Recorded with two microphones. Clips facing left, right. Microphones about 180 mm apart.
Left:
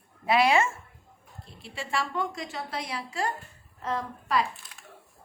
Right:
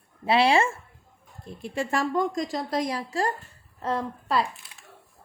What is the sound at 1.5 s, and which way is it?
A woman's voice, 45° right (ahead or behind).